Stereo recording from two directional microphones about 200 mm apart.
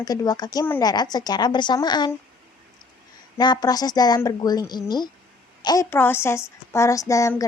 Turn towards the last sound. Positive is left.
turn(degrees=15)  # may be behind; listen again after turning